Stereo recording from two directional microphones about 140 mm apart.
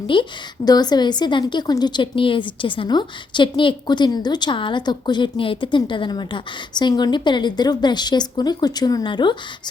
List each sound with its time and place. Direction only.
0.1 s a woman's voice: 35° left (ahead or behind)